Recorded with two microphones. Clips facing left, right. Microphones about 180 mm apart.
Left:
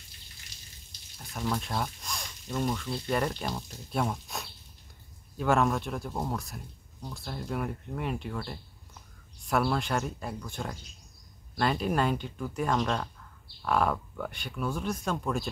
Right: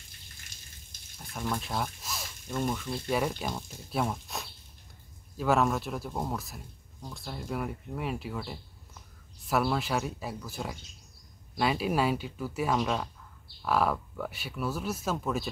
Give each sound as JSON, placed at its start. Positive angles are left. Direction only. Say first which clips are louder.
{"t": 0.5, "sound": "water tap", "louder": "left 1 dB", "side_deg": -50}
{"t": 1.1, "sound": "water", "louder": "even", "side_deg": 0}
{"t": 1.4, "sound": "speech", "louder": "left 1 dB", "side_deg": -5}